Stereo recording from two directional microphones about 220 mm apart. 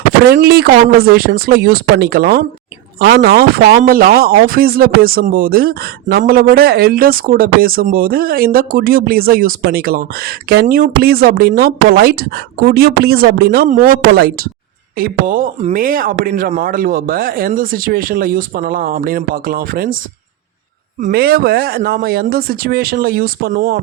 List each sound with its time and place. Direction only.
0.3 s speech: 45° right (ahead or behind)
21.0 s speech: 45° right (ahead or behind)